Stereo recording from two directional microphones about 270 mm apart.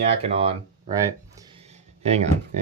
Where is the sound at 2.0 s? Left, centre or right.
Right.